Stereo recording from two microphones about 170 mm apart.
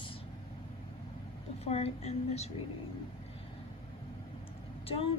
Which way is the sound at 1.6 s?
35° left (ahead or behind).